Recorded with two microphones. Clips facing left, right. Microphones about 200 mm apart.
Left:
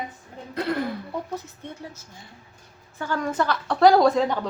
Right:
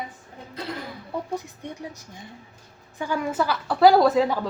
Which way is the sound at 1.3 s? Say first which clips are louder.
Right 2 dB; 15° right (ahead or behind).